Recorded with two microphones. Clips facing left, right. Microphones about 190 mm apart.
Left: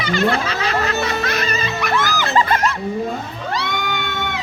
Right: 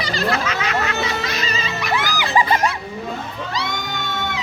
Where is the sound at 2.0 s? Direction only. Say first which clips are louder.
Left 1 dB; 15° right (ahead or behind).